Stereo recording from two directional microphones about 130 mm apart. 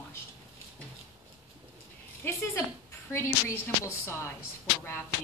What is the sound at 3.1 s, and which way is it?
A woman's voice, 20° left (ahead or behind).